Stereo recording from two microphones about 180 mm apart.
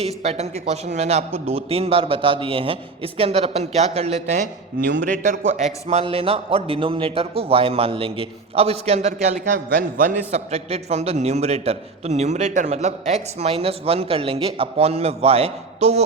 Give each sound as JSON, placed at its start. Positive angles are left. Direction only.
{"t": 0.0, "sound": "a man's voice", "side_deg": -35}
{"t": 4.9, "sound": "a man's voice", "side_deg": -50}
{"t": 5.5, "sound": "a man's voice", "side_deg": -35}